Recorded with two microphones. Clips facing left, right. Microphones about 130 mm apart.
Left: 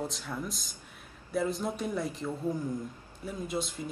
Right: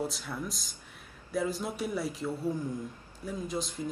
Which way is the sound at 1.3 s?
Centre (ahead or behind).